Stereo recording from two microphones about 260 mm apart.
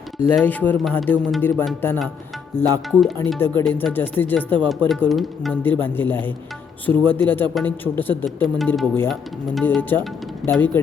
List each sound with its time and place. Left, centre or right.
0.3 s speech: centre
8.1 s speech: centre
8.5 s speech: centre